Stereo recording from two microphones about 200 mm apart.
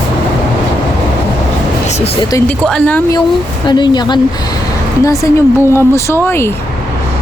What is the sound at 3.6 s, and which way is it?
Speech, 20° left (ahead or behind).